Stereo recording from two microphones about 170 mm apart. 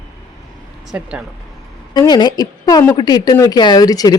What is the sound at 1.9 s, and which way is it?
Speech, 25° left (ahead or behind).